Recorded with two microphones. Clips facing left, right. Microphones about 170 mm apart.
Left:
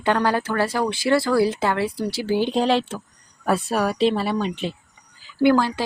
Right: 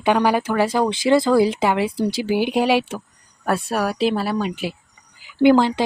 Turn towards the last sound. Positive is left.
turn(degrees=-20)  # may be behind; listen again after turning